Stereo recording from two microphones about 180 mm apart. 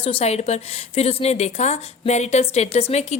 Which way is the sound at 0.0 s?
30° left (ahead or behind).